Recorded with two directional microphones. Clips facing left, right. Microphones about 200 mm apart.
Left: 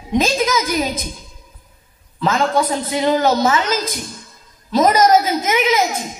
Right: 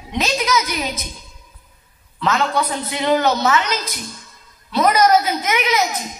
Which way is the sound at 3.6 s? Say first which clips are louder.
Left 4 dB; 50° left (ahead or behind).